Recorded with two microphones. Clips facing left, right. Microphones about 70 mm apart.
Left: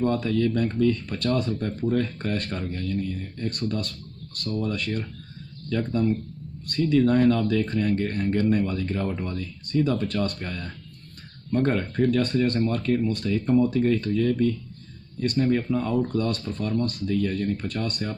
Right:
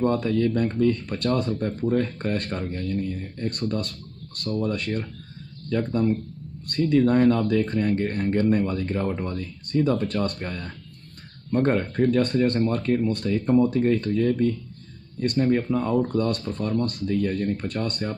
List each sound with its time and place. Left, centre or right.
0.0 s speech: right